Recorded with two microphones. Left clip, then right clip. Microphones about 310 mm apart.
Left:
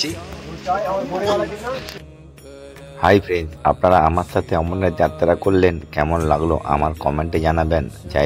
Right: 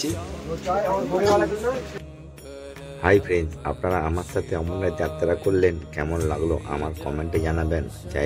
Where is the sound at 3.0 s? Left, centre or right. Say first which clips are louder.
Left 4 dB; centre.